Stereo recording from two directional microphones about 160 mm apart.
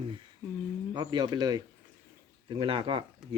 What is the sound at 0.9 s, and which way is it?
Speech, 25° right (ahead or behind).